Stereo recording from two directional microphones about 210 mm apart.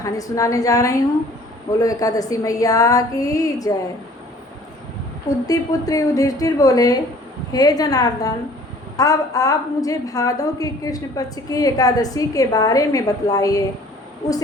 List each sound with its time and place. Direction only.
0.0 s a woman's voice: 15° left (ahead or behind)
5.5 s a woman's voice: 15° left (ahead or behind)